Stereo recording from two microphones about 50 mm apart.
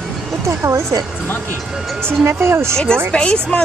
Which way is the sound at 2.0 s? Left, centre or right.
Right.